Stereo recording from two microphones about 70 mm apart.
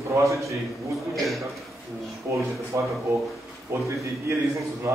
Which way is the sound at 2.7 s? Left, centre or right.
Right.